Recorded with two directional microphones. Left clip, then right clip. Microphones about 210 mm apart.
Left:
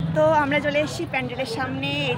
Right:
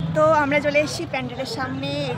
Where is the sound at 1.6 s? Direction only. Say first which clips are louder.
Even; 5° left (ahead or behind).